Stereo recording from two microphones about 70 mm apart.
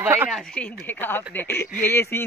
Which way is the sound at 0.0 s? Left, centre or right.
Right.